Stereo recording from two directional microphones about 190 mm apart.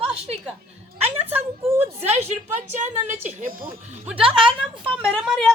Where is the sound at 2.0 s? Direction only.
35° right (ahead or behind).